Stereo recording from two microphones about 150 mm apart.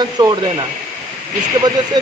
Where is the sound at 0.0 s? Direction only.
30° right (ahead or behind).